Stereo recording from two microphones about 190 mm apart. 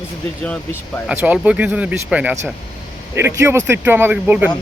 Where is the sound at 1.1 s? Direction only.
10° right (ahead or behind).